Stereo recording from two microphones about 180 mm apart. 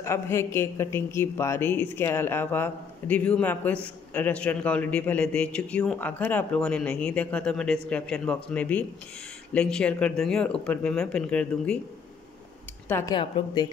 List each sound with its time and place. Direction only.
0.0 s speech: 15° left (ahead or behind)
12.8 s speech: 15° left (ahead or behind)
13.1 s a woman's voice: 25° left (ahead or behind)